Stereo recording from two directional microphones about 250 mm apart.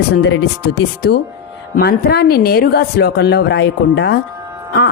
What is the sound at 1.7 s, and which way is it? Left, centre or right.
A woman's voice, left.